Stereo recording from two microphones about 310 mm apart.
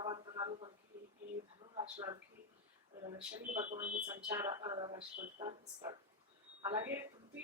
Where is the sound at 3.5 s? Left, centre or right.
Right.